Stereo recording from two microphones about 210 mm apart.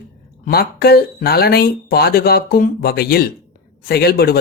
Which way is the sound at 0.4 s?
45° left (ahead or behind).